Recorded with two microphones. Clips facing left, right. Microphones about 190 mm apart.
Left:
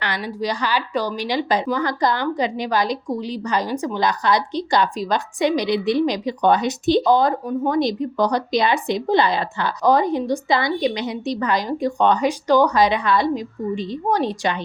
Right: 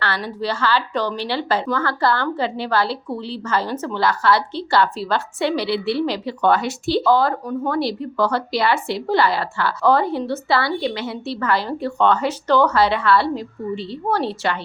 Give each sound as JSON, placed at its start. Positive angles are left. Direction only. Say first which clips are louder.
{"t": 0.0, "sound": "a woman's voice", "louder": "even", "side_deg": 15}